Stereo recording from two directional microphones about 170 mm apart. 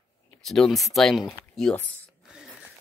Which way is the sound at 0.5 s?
Centre (ahead or behind).